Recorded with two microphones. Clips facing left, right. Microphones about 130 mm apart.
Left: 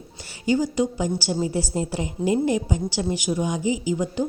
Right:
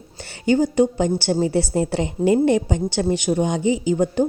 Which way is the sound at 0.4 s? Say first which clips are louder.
Right 5 dB; 60° right (ahead or behind).